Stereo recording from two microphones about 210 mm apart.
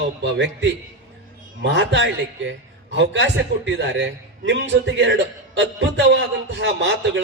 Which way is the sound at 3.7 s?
60° right (ahead or behind).